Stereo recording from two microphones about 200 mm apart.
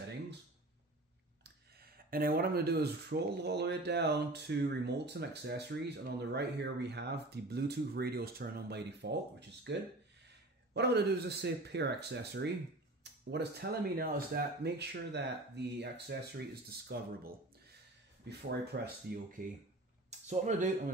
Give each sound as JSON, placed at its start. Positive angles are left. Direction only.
{"t": 1.4, "sound": "speech", "side_deg": -50}
{"t": 10.7, "sound": "speech", "side_deg": -55}
{"t": 18.5, "sound": "speech", "side_deg": -50}
{"t": 20.1, "sound": "speech", "side_deg": -35}